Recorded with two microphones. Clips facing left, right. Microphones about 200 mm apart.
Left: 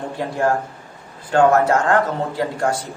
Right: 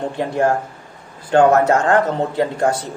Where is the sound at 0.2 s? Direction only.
20° right (ahead or behind).